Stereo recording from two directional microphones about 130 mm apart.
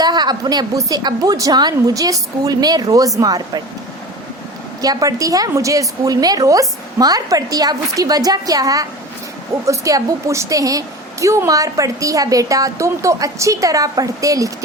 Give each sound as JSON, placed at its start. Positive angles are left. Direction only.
{"t": 0.0, "sound": "a woman's voice", "side_deg": -35}
{"t": 4.8, "sound": "a woman's voice", "side_deg": -30}